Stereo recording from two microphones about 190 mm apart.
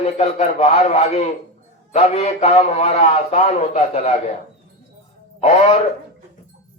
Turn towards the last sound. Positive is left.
turn(degrees=35)  # may be behind; listen again after turning